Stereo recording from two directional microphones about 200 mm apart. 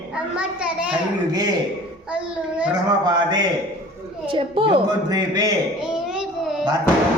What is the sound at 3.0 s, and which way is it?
A man's voice, 20° right (ahead or behind).